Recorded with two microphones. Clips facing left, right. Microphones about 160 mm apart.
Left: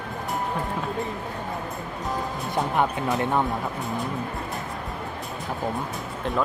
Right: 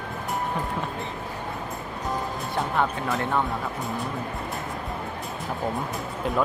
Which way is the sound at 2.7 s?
15° left (ahead or behind).